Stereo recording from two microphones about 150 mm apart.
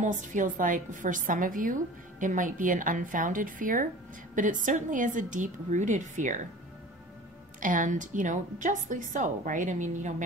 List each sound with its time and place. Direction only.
0.0 s a woman's voice: 60° right (ahead or behind)
7.6 s a woman's voice: 60° right (ahead or behind)